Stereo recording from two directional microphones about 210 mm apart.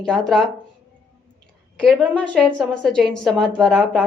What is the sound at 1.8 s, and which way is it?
A woman's voice, 5° left (ahead or behind).